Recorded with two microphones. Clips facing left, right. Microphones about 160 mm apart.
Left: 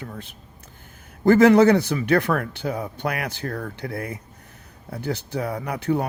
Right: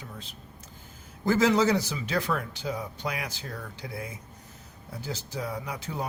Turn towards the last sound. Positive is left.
turn(degrees=60)  # may be behind; listen again after turning